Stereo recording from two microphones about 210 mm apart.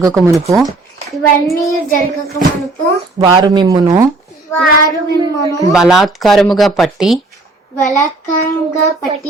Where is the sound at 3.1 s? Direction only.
20° right (ahead or behind).